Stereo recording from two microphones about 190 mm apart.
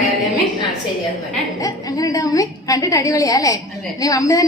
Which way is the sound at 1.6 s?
20° left (ahead or behind).